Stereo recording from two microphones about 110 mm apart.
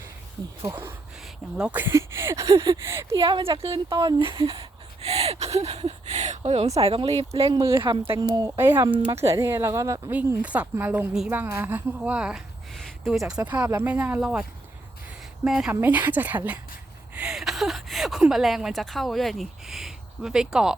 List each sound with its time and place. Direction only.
0.7 s speech: 20° right (ahead or behind)
3.2 s speech: 45° right (ahead or behind)
3.8 s speech: 40° right (ahead or behind)
4.4 s speech: 55° right (ahead or behind)
5.0 s speech: 70° right (ahead or behind)
7.8 s speech: 45° right (ahead or behind)
8.2 s speech: 35° right (ahead or behind)
8.5 s speech: 20° right (ahead or behind)
10.1 s a woman's voice: 15° right (ahead or behind)
12.7 s a sound: centre (ahead or behind)
13.4 s a woman's voice: 15° right (ahead or behind)
15.4 s a woman's voice: 5° right (ahead or behind)
15.7 s a woman's voice: 15° right (ahead or behind)